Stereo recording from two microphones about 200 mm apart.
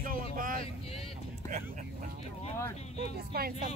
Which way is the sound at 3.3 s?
50° right (ahead or behind).